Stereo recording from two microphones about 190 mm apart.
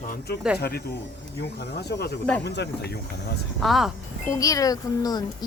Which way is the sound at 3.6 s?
Centre (ahead or behind).